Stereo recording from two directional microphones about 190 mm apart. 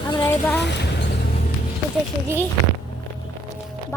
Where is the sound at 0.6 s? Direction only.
65° left (ahead or behind).